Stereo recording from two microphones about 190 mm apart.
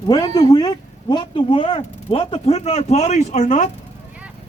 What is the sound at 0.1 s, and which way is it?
Speech, 20° left (ahead or behind).